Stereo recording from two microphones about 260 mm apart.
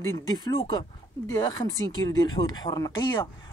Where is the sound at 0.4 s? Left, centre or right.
Centre.